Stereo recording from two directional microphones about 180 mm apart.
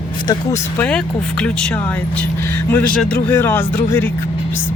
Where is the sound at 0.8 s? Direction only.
5° left (ahead or behind).